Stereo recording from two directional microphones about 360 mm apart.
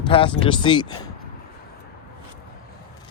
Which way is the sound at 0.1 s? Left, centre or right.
Centre.